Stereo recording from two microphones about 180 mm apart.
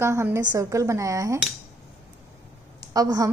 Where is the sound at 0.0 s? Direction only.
15° right (ahead or behind).